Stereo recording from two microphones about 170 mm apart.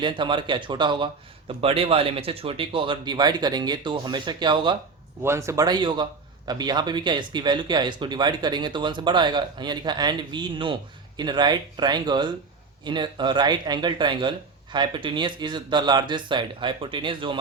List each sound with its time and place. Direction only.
0.0 s a man's voice: 30° right (ahead or behind)
5.2 s a man's voice: 15° right (ahead or behind)